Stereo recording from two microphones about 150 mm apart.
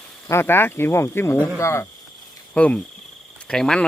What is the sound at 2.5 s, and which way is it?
Speech, 10° left (ahead or behind).